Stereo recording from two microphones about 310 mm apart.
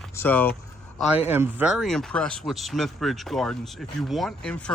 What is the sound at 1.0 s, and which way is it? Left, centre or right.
Speech, centre.